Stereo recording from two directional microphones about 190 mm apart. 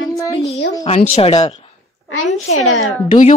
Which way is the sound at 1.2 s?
30° left (ahead or behind).